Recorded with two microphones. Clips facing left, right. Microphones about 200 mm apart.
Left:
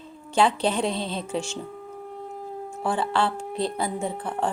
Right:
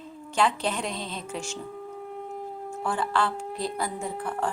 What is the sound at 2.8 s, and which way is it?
A woman's voice, 30° left (ahead or behind).